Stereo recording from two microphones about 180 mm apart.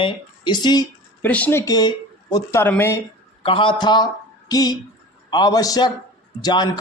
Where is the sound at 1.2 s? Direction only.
10° left (ahead or behind).